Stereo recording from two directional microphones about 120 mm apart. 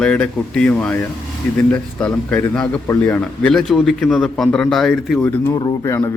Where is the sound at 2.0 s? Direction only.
15° left (ahead or behind).